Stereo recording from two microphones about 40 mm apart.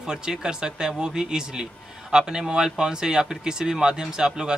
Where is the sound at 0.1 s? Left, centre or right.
Centre.